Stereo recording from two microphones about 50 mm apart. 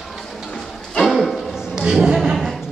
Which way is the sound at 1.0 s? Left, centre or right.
Centre.